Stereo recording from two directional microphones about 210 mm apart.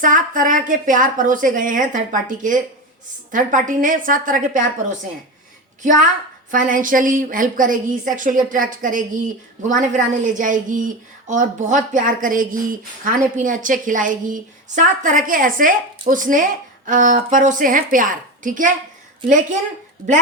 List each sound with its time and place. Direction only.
0.0 s a woman's voice: 40° right (ahead or behind)
6.5 s a woman's voice: 40° right (ahead or behind)